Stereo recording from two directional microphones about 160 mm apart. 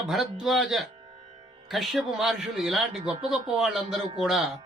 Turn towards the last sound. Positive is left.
turn(degrees=0)  # may be behind; listen again after turning